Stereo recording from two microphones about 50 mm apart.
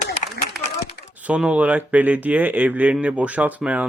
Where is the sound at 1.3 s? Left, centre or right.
Right.